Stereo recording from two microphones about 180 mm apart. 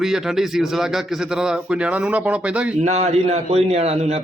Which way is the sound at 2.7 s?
40° right (ahead or behind).